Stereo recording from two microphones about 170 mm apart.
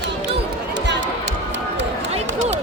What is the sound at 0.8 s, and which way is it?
Music, 90° right.